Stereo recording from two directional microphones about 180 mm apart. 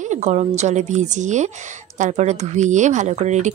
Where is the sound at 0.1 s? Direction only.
40° right (ahead or behind).